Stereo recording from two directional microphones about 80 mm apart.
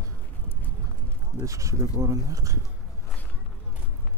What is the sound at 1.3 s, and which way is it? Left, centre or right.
Speech, right.